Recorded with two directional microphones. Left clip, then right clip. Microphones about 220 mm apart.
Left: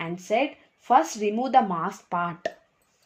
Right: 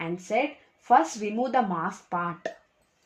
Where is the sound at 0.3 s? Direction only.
45° left (ahead or behind).